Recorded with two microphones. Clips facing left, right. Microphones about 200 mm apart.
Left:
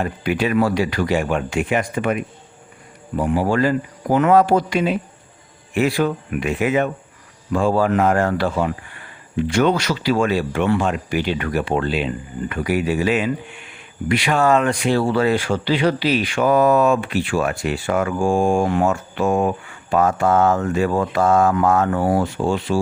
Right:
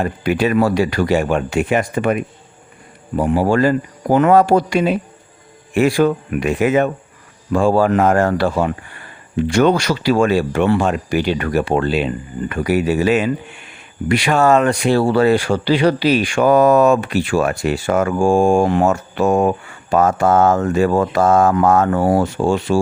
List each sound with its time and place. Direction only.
0.0 s speech: 40° right (ahead or behind)